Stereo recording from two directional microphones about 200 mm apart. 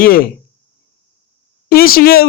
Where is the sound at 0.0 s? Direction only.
45° left (ahead or behind).